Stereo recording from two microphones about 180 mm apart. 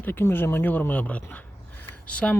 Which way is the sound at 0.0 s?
10° left (ahead or behind).